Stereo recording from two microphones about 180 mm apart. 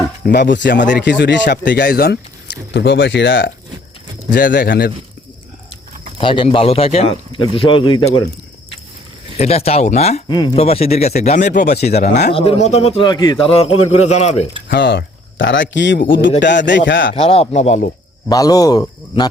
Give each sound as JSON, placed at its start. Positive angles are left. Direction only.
{"t": 0.2, "sound": "speech", "side_deg": 70}
{"t": 1.6, "sound": "speech", "side_deg": 60}
{"t": 4.3, "sound": "speech", "side_deg": 50}
{"t": 6.1, "sound": "speech", "side_deg": 30}
{"t": 9.4, "sound": "a man's voice", "side_deg": 35}
{"t": 10.2, "sound": "a man's voice", "side_deg": 25}
{"t": 14.7, "sound": "speech", "side_deg": 75}
{"t": 16.4, "sound": "speech", "side_deg": 75}
{"t": 17.2, "sound": "a man's voice", "side_deg": 35}
{"t": 18.3, "sound": "speech", "side_deg": 20}